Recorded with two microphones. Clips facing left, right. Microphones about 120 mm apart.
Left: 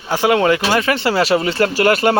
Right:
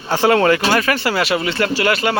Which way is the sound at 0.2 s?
15° left (ahead or behind).